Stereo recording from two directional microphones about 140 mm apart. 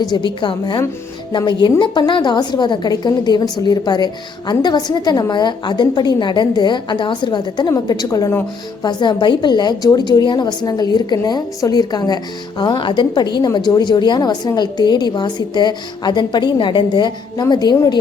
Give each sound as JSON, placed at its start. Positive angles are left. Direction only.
{"t": 0.0, "sound": "a woman's voice", "side_deg": 30}